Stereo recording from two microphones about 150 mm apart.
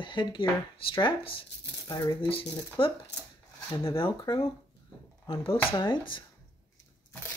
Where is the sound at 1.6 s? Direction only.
20° left (ahead or behind).